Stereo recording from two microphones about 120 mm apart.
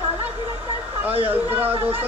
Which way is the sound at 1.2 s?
15° right (ahead or behind).